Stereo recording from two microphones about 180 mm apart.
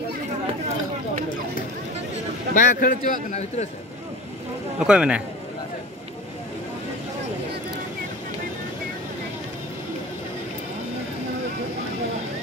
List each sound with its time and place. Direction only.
2.5 s a man's voice: 50° left (ahead or behind)
4.7 s speech: 5° right (ahead or behind)